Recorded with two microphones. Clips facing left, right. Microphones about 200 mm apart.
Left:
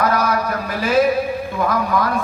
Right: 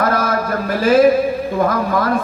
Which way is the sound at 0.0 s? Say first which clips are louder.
Right 1 dB; 45° right (ahead or behind).